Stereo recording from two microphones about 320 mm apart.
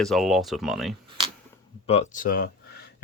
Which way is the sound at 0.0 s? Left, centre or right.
Centre.